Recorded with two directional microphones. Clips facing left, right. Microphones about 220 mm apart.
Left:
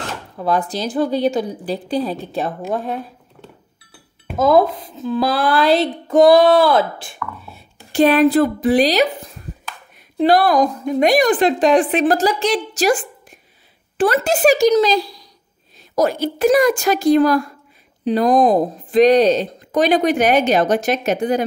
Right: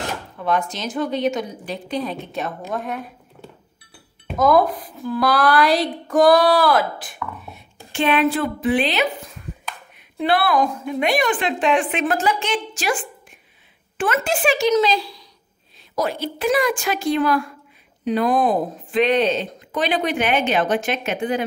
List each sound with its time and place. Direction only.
0.4 s speech: 35° left (ahead or behind)
4.4 s a sound: 25° left (ahead or behind)
7.5 s speech: 40° left (ahead or behind)